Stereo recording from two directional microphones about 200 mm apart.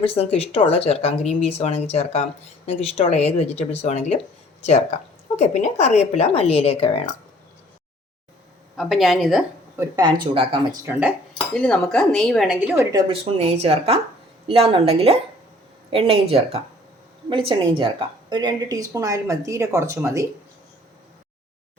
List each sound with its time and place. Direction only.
0.0 s speech: 30° left (ahead or behind)
8.7 s speech: centre (ahead or behind)
9.8 s speech: 20° right (ahead or behind)
11.5 s a woman's voice: 5° left (ahead or behind); by 20.2 s 15° right (ahead or behind)